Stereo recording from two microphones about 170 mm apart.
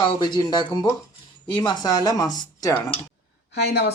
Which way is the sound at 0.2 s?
25° left (ahead or behind).